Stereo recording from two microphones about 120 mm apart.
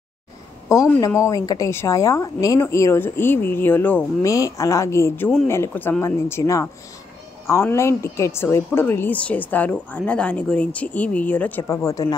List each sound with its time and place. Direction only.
0.7 s a woman's voice: 30° left (ahead or behind)
4.3 s a woman's voice: 25° left (ahead or behind)
11.7 s speech: 30° left (ahead or behind)